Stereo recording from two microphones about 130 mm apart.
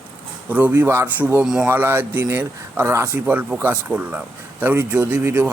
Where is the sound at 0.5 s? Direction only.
15° right (ahead or behind).